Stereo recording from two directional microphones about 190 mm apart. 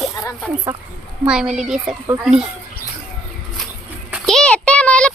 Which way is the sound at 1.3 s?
5° right (ahead or behind).